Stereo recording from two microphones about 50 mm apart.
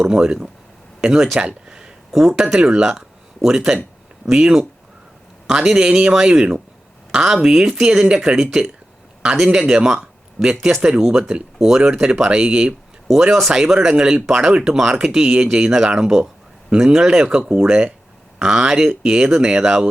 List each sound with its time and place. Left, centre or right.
0.1 s speech: centre
1.4 s speech: centre
2.1 s speech: centre
9.7 s a sound: centre
10.6 s speech: centre; by 12.7 s right
13.7 s speech: centre